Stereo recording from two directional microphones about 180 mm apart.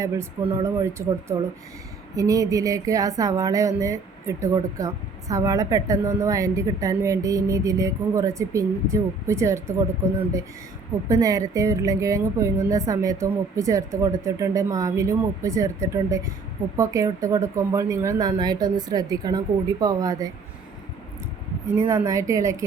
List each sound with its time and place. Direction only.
0.6 s a woman's voice: 15° right (ahead or behind)
11.1 s a woman's voice: 20° right (ahead or behind)
21.8 s a woman's voice: 20° right (ahead or behind)